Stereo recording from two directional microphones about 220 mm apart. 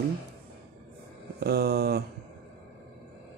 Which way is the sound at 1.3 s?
45° right (ahead or behind).